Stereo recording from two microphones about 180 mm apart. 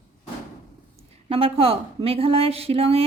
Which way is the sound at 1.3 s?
30° right (ahead or behind).